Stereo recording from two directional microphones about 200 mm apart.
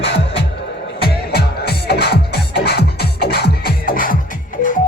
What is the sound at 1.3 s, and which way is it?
Music, 50° left (ahead or behind).